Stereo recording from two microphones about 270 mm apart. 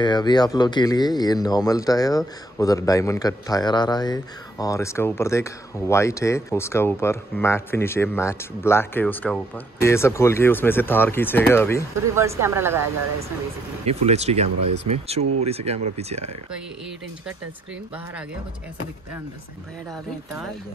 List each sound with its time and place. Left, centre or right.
0.0 s speech: centre
12.2 s speech: centre
13.8 s speech: right